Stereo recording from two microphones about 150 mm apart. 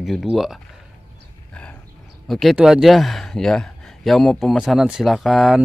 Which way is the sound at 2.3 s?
Centre (ahead or behind).